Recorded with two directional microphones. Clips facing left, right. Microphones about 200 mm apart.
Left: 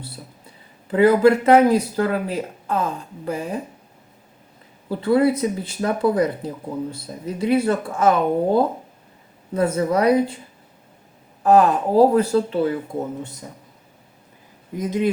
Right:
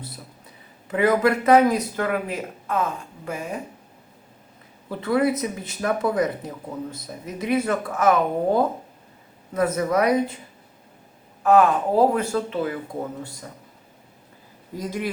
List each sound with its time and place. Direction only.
0.9 s speech: 30° left (ahead or behind)
4.9 s speech: 30° left (ahead or behind)
11.4 s speech: 35° left (ahead or behind)
14.7 s speech: 20° left (ahead or behind)